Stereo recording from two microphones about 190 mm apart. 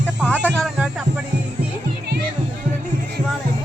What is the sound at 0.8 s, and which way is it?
Music, 5° right (ahead or behind).